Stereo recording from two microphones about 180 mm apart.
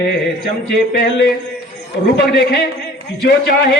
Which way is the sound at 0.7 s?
60° left (ahead or behind).